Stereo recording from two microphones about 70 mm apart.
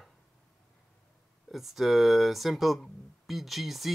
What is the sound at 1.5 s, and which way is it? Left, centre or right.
Speech, centre.